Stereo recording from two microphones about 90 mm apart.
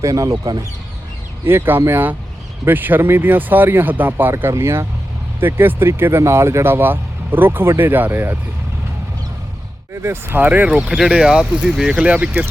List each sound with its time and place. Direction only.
0.0 s speech: 35° right (ahead or behind)
1.5 s speech: 25° right (ahead or behind)
9.9 s speech: 30° right (ahead or behind)